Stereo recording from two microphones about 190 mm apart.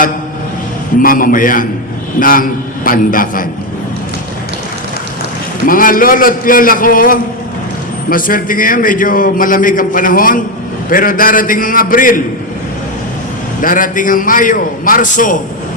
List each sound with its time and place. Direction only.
0.9 s a man's voice: 45° left (ahead or behind)
5.6 s a man's voice: 50° left (ahead or behind)
13.6 s a man's voice: 45° left (ahead or behind)